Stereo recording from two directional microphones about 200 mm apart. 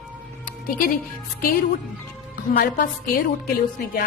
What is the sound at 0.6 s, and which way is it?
Speech, 45° left (ahead or behind).